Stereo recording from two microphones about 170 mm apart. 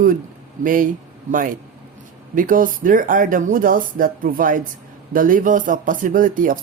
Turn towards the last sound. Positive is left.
turn(degrees=-50)  # may be behind; listen again after turning